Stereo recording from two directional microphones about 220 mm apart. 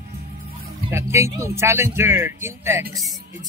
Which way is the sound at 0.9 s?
15° right (ahead or behind).